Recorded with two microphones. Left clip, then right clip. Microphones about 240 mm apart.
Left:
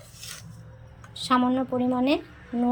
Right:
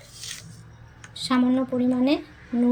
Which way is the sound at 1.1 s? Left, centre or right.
Centre.